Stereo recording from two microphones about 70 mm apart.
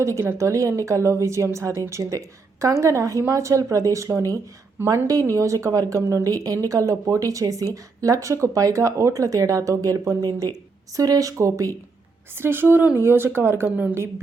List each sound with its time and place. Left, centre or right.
0.0 s speech: right
12.4 s speech: right